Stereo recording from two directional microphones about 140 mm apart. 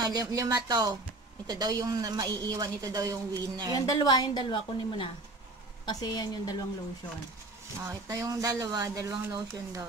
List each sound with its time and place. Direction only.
0.0 s a woman's voice: 30° right (ahead or behind)
3.7 s a woman's voice: 25° left (ahead or behind)
7.9 s a woman's voice: 25° right (ahead or behind)